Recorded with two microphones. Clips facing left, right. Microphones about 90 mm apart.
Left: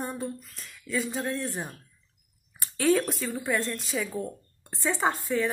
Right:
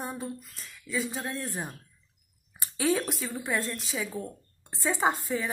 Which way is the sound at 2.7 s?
Centre (ahead or behind).